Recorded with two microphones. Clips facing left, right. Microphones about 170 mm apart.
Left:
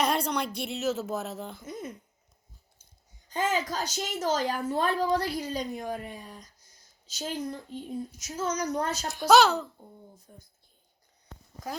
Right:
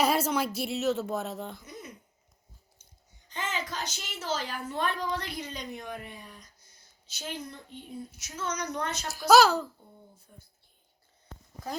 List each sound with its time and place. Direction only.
0.0 s a woman's voice: 5° right (ahead or behind)
3.2 s a woman's voice: 40° left (ahead or behind)
9.1 s speech: centre (ahead or behind)
10.3 s a woman's voice: 40° left (ahead or behind)